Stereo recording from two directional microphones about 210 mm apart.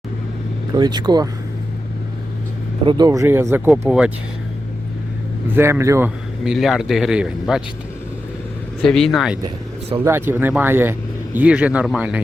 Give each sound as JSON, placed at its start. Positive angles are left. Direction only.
{"t": 0.7, "sound": "speech", "side_deg": -20}
{"t": 2.8, "sound": "speech", "side_deg": -15}
{"t": 5.5, "sound": "speech", "side_deg": -10}
{"t": 6.4, "sound": "a man's voice", "side_deg": 0}
{"t": 8.8, "sound": "a man's voice", "side_deg": 5}
{"t": 10.0, "sound": "speech", "side_deg": -10}